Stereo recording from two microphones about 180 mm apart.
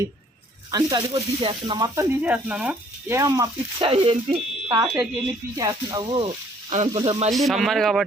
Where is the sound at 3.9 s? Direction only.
30° right (ahead or behind).